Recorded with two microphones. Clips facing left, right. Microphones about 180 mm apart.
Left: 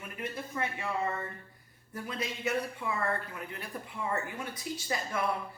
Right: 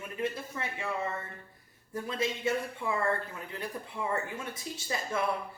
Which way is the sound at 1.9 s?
25° right (ahead or behind).